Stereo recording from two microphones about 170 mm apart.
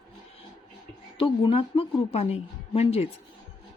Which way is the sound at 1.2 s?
30° left (ahead or behind).